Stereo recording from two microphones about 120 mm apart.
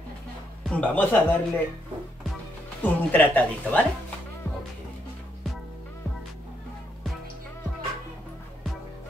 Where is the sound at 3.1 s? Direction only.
15° left (ahead or behind).